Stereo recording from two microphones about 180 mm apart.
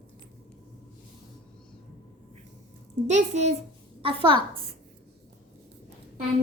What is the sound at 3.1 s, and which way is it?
Speech, 40° right (ahead or behind).